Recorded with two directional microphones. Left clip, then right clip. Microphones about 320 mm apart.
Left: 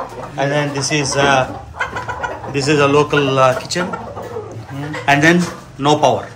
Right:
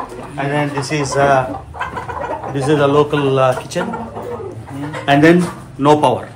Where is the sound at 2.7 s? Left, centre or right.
Centre.